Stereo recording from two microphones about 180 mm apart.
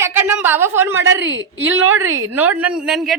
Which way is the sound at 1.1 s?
90° right.